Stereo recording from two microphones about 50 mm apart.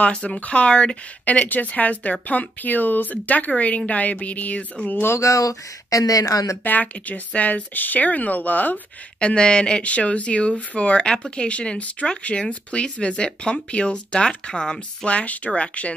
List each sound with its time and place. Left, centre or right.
0.0 s speech: left
5.0 s a woman's voice: left
6.6 s speech: left
9.2 s speech: centre